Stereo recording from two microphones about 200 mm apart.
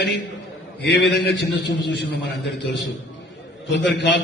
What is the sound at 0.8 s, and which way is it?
A man's voice, 60° left (ahead or behind).